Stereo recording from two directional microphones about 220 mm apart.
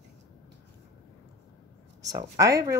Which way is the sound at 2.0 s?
15° right (ahead or behind).